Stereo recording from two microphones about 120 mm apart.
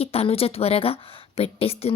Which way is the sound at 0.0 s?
55° left (ahead or behind).